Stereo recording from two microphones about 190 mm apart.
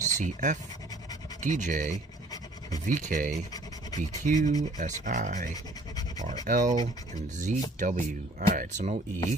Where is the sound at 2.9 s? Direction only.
45° right (ahead or behind).